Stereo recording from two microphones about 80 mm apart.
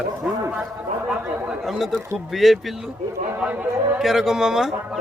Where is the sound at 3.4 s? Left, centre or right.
Centre.